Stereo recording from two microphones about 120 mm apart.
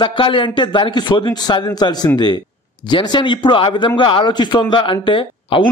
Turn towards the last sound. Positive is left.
turn(degrees=45)  # may be behind; listen again after turning